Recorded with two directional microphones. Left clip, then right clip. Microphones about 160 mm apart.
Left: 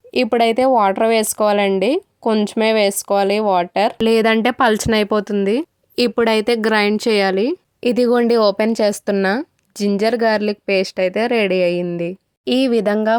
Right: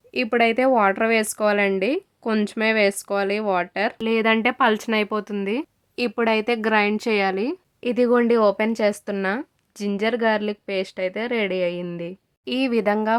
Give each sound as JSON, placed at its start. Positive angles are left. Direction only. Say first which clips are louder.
{"t": 0.1, "sound": "speech", "louder": "left 5 dB", "side_deg": 35}
{"t": 4.0, "sound": "speech", "louder": "left 4 dB", "side_deg": 50}